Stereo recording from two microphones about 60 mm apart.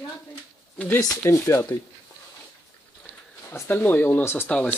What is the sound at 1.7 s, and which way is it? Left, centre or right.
Speech, left.